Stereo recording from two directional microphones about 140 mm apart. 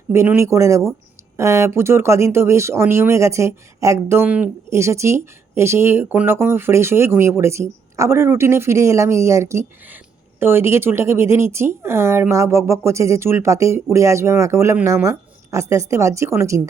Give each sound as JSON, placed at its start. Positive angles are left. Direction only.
{"t": 0.1, "sound": "speech", "side_deg": -20}